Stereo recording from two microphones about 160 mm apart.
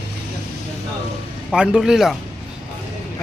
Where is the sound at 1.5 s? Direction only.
5° right (ahead or behind).